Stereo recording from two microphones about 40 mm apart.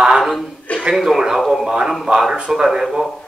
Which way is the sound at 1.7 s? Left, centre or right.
Centre.